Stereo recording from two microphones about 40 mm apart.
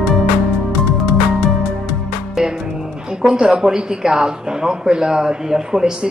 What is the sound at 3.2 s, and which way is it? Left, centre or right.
Speech, right.